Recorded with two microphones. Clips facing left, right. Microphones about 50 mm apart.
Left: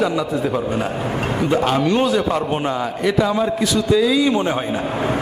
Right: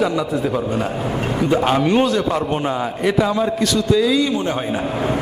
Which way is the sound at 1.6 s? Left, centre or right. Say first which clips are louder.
Right 2 dB; centre.